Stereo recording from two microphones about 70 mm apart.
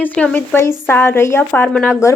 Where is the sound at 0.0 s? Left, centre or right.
Left.